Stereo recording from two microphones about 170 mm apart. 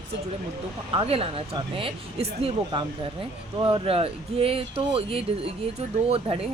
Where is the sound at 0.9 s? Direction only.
35° right (ahead or behind).